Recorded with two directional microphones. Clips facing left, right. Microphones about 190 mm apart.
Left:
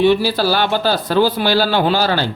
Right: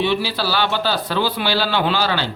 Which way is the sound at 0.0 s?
45° left (ahead or behind).